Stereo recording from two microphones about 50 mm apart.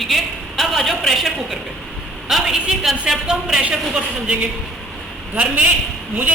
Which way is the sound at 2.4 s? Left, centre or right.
Centre.